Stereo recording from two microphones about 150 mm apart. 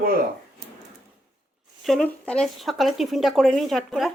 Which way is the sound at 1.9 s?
5° left (ahead or behind).